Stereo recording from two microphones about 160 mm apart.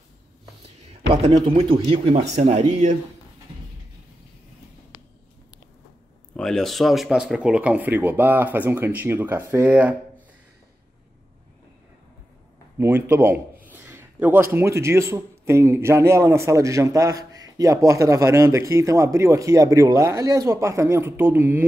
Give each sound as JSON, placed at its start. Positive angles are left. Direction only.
{"t": 1.1, "sound": "speech", "side_deg": -35}
{"t": 6.3, "sound": "speech", "side_deg": 0}
{"t": 12.7, "sound": "a man's voice", "side_deg": -15}